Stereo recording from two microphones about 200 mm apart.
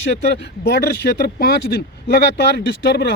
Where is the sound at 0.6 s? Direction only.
50° left (ahead or behind).